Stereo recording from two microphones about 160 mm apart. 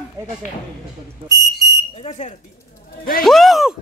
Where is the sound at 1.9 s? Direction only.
45° left (ahead or behind).